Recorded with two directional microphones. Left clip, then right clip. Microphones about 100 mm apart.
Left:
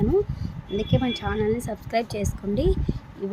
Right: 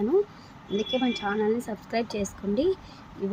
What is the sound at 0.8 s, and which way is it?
Speech, 15° left (ahead or behind).